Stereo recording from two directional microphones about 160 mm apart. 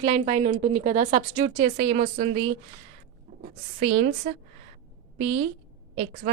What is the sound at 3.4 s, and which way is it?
Speech, 60° right (ahead or behind).